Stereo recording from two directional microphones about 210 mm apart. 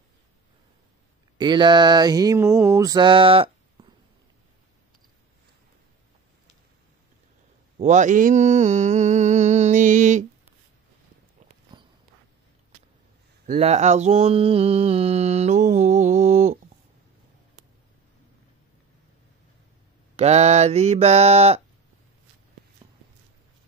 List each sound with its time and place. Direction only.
1.4 s mantra: 20° right (ahead or behind)
7.8 s mantra: 35° right (ahead or behind)
11.7 s walk: 20° right (ahead or behind)
13.5 s mantra: 30° right (ahead or behind)
20.2 s mantra: 30° right (ahead or behind)
22.8 s a sound: 20° right (ahead or behind)